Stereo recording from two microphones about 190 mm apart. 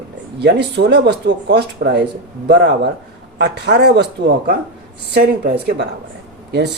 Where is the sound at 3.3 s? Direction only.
60° right (ahead or behind).